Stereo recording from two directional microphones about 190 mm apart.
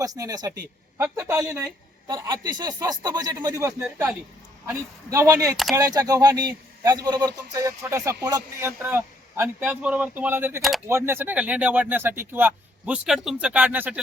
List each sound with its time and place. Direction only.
0.0 s speech: 20° right (ahead or behind)